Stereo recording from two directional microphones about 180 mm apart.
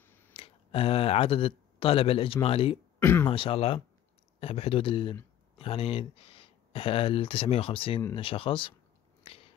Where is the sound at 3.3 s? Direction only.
30° left (ahead or behind).